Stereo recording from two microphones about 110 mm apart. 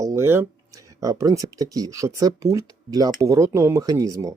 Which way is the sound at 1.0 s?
30° right (ahead or behind).